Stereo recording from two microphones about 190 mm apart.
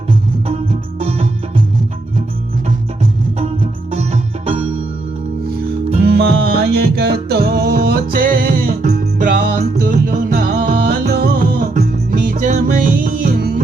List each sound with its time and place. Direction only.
0.4 s music: 30° right (ahead or behind)
3.9 s music: 35° right (ahead or behind)
6.0 s music: 60° right (ahead or behind)